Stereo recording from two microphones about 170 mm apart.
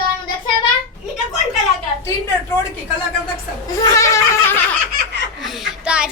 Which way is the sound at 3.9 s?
15° left (ahead or behind).